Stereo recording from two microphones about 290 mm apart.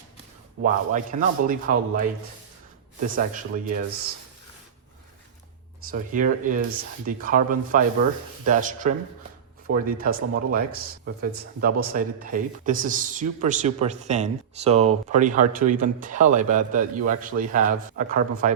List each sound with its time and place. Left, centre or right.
0.6 s speech: right
3.2 s speech: right
5.9 s speech: right